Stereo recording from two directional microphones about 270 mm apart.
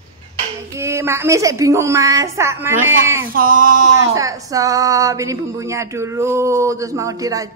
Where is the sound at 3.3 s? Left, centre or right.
Right.